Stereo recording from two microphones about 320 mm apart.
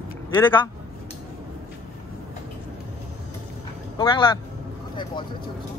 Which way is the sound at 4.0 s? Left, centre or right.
Centre.